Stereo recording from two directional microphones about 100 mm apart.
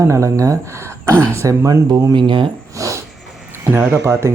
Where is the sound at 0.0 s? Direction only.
30° right (ahead or behind).